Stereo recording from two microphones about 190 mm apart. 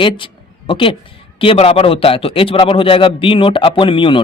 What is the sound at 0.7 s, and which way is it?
Speech, 25° left (ahead or behind).